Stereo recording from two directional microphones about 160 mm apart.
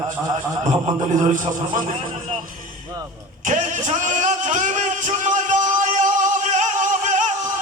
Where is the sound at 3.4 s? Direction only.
50° right (ahead or behind).